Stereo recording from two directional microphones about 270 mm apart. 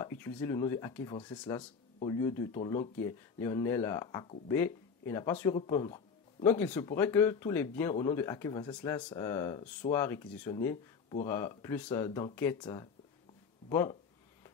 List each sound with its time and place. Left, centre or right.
0.0 s speech: centre
8.7 s speech: centre